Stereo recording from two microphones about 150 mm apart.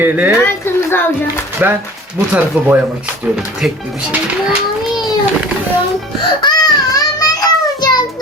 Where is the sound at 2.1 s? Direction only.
15° right (ahead or behind).